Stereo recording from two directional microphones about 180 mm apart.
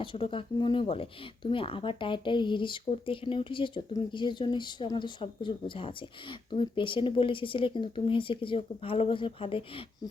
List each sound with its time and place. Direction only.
0.0 s speech: 30° left (ahead or behind)